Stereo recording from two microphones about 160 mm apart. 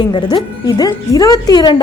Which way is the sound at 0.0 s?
25° left (ahead or behind).